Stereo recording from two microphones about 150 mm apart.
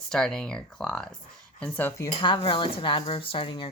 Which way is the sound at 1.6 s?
15° left (ahead or behind).